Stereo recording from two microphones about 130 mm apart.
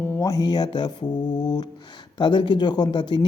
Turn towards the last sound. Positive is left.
turn(degrees=35)  # may be behind; listen again after turning